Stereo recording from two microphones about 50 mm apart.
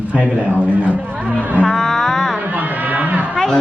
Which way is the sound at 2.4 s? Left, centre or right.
Right.